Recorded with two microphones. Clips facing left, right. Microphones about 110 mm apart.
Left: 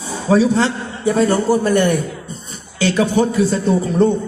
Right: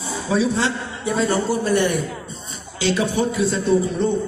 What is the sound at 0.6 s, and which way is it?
A man's voice, 50° left (ahead or behind).